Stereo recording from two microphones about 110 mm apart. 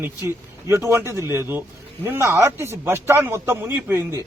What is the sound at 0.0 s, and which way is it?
A man's voice, 25° right (ahead or behind).